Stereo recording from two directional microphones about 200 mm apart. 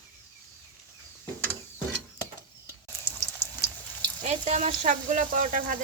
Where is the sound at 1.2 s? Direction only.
10° left (ahead or behind).